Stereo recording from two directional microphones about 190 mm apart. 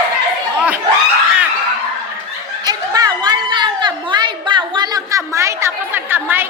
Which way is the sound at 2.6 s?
20° right (ahead or behind).